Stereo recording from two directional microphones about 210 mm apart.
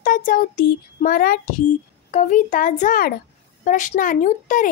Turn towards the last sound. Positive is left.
turn(degrees=35)  # may be behind; listen again after turning